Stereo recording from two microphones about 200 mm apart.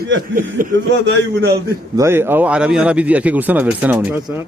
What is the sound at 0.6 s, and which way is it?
Speech, 45° right (ahead or behind).